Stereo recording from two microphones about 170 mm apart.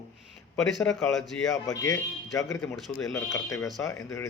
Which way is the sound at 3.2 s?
20° left (ahead or behind).